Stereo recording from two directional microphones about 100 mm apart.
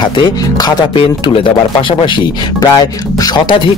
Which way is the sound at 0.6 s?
45° left (ahead or behind).